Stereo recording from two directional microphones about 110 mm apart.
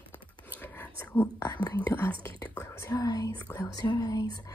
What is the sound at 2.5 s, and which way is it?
Whispering, 20° left (ahead or behind).